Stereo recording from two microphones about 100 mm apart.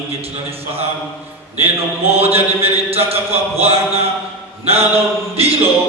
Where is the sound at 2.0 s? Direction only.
80° right.